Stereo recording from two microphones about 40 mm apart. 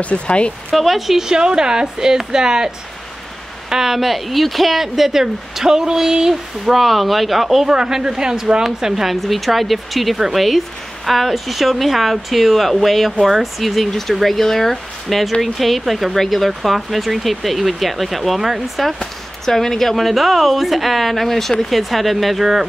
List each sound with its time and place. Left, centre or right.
0.0 s speech: left
0.7 s speech: centre
3.7 s speech: centre
6.7 s a woman's voice: centre
19.4 s a woman's voice: centre